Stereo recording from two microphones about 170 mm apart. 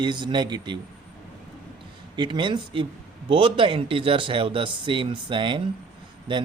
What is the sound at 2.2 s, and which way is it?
A man's voice, 30° right (ahead or behind).